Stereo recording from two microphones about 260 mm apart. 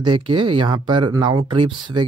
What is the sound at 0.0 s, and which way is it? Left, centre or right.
Speech, centre.